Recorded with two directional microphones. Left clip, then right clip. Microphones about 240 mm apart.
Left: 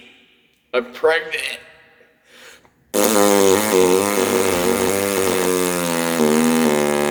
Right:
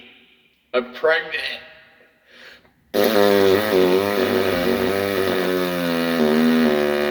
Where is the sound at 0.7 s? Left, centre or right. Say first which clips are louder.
Left 1 dB; left.